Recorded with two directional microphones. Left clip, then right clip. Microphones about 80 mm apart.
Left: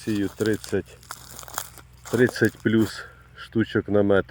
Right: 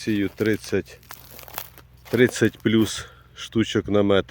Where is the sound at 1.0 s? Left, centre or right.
Left.